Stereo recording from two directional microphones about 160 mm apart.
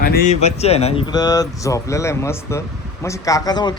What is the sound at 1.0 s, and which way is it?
Speech, 25° left (ahead or behind).